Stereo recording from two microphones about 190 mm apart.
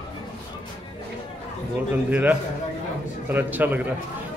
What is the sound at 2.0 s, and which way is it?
Speech, 10° right (ahead or behind).